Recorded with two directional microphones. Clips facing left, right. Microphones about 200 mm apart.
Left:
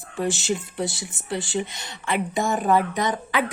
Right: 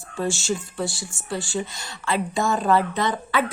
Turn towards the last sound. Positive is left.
turn(degrees=15)  # may be behind; listen again after turning